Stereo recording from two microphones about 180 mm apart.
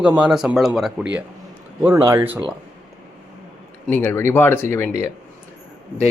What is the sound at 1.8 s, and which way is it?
Speech, 15° right (ahead or behind).